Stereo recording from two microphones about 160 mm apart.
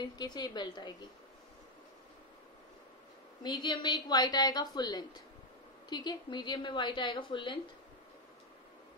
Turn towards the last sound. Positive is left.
turn(degrees=30)  # may be behind; listen again after turning